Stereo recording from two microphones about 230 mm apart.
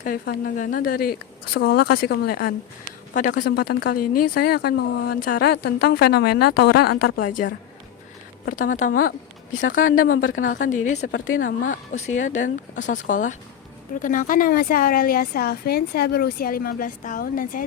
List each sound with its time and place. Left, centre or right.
0.0 s speech: left
7.2 s speech: left
9.6 s speech: left
10.4 s speech: left
11.1 s speech: left
11.4 s speech: left